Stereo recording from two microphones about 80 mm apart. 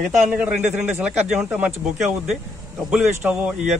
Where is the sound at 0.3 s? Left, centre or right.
Centre.